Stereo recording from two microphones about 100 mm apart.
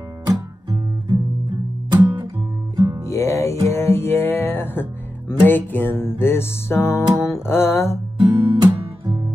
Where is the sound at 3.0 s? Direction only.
30° left (ahead or behind).